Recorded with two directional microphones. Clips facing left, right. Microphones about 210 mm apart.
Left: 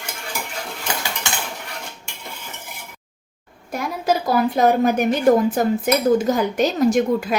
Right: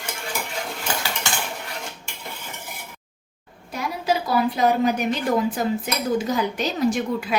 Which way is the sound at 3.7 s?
50° left (ahead or behind).